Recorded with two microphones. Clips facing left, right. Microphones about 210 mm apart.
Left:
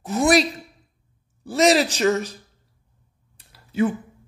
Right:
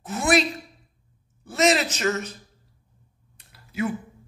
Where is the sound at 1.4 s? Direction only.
35° left (ahead or behind).